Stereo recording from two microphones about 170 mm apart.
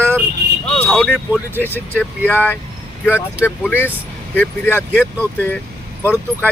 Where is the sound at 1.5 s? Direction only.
10° left (ahead or behind).